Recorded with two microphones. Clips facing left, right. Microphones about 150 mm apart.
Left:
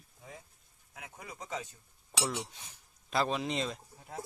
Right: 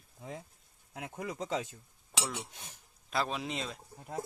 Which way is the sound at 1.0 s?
90° right.